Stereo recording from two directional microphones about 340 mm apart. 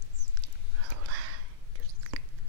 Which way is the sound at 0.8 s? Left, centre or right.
Right.